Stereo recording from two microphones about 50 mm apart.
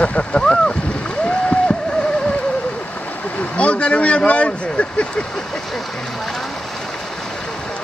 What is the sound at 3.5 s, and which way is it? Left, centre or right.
Speech, left.